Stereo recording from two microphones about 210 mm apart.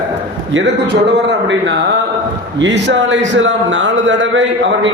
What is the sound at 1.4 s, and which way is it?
A man's voice, 60° right (ahead or behind).